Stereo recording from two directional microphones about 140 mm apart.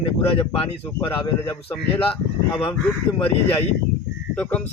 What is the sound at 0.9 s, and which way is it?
Speech, 10° left (ahead or behind).